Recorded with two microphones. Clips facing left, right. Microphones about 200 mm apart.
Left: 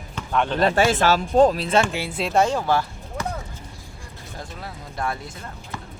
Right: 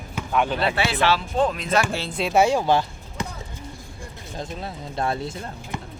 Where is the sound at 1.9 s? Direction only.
10° left (ahead or behind).